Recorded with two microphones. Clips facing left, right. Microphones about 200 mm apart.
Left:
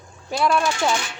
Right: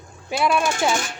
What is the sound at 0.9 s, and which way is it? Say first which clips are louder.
Speech: right 1 dB; 45° right (ahead or behind).